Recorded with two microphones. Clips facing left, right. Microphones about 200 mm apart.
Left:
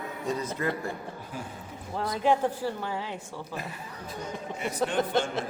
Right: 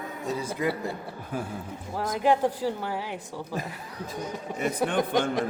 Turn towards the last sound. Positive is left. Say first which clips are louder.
# right 2 dB
turn(degrees=-15)  # may be behind; listen again after turning